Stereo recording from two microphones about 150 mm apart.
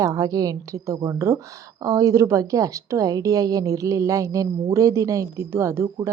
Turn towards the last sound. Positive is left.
turn(degrees=-20)  # may be behind; listen again after turning